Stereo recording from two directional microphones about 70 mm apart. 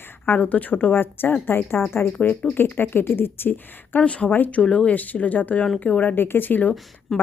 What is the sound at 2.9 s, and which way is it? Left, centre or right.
A woman's voice, left.